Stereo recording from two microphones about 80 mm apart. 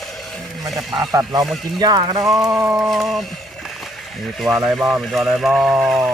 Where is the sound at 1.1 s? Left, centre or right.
Right.